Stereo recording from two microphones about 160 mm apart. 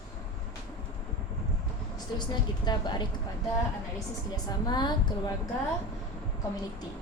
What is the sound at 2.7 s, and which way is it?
Speech, 25° left (ahead or behind).